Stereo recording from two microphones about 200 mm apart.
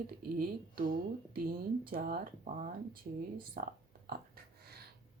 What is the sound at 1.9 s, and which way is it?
Speech, 45° right (ahead or behind).